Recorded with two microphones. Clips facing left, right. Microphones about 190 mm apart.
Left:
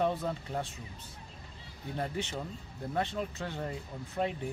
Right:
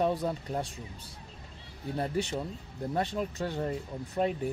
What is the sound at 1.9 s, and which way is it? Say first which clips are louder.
Speech: right 4 dB; 35° right (ahead or behind).